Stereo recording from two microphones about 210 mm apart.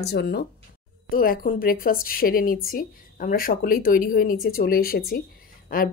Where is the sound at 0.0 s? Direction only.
50° left (ahead or behind).